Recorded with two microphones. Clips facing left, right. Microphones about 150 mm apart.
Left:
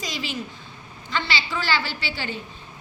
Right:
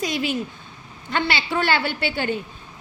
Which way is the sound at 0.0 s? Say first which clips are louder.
Right 7 dB; 55° right (ahead or behind).